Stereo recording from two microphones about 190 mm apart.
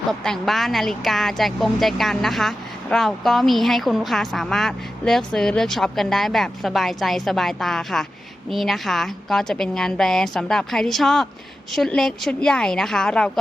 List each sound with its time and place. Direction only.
0.1 s speech: centre (ahead or behind)